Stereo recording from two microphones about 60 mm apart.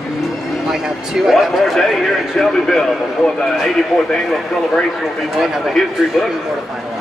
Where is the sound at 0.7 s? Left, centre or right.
Centre.